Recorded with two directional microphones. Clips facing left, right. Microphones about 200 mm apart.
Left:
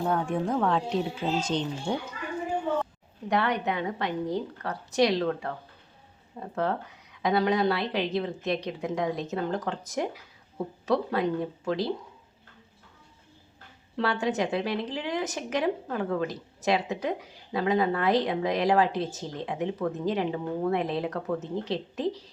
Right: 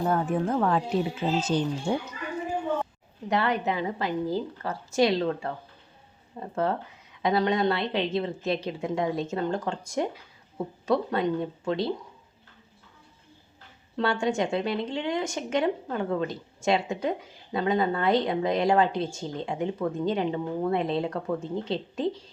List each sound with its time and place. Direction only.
0.0 s speech: 5° right (ahead or behind)
3.2 s speech: centre (ahead or behind)
13.9 s speech: centre (ahead or behind)